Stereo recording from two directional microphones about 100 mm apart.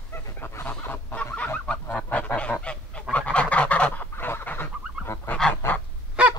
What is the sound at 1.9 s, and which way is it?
Goose, 15° left (ahead or behind).